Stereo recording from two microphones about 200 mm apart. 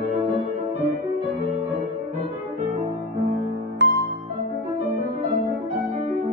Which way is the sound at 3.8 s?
60° right (ahead or behind).